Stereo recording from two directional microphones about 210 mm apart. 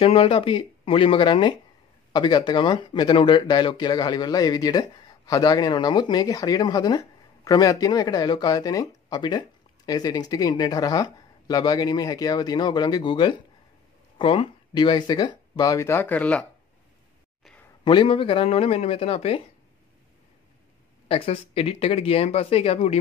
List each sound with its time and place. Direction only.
0.0 s speech: 25° left (ahead or behind); by 16.4 s 5° left (ahead or behind)
17.4 s a sound: 5° left (ahead or behind)
17.8 s speech: 25° left (ahead or behind)
21.1 s speech: 30° left (ahead or behind)